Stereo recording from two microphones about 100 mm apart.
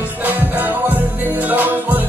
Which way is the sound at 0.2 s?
20° right (ahead or behind).